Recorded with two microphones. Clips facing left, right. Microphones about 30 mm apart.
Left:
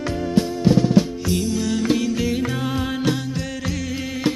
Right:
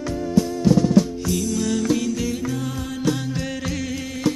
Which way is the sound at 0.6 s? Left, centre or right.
Left.